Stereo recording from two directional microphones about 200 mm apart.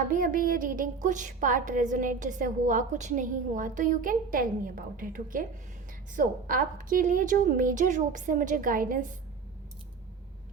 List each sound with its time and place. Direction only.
0.1 s a woman's voice: 45° right (ahead or behind)